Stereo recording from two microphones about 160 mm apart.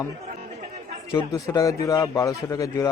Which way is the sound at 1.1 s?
20° left (ahead or behind).